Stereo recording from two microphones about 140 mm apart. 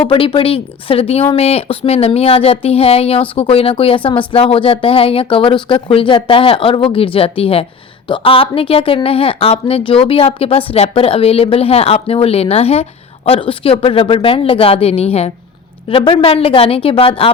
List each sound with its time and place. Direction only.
0.1 s a woman's voice: 40° left (ahead or behind)